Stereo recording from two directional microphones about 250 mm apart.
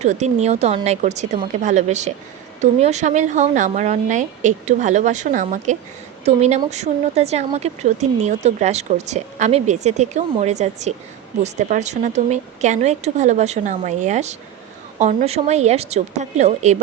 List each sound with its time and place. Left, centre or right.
0.0 s speech: right